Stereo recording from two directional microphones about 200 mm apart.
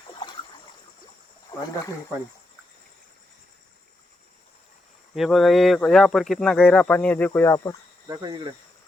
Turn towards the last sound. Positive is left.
turn(degrees=15)  # may be behind; listen again after turning